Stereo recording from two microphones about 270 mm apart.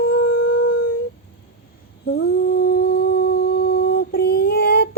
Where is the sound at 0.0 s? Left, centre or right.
Left.